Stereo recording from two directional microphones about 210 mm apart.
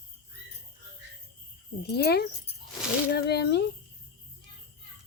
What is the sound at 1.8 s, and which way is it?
Speech, 50° left (ahead or behind).